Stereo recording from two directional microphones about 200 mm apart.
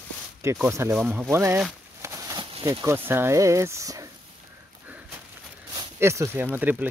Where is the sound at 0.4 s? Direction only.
10° right (ahead or behind).